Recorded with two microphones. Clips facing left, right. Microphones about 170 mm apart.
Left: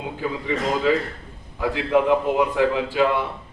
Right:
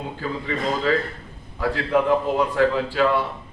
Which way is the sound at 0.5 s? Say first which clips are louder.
Left 1 dB; 15° left (ahead or behind).